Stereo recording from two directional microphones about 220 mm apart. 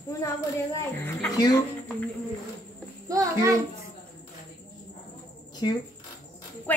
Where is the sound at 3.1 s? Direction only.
15° right (ahead or behind).